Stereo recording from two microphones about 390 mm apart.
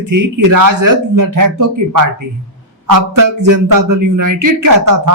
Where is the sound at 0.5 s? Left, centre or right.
Right.